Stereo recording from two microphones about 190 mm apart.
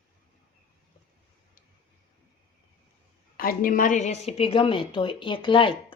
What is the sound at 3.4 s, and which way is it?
A woman's voice, 50° left (ahead or behind).